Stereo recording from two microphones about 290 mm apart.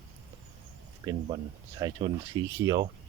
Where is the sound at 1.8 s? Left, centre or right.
Centre.